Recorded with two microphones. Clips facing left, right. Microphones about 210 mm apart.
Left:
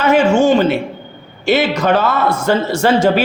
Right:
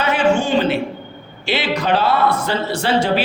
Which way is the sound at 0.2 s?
25° left (ahead or behind).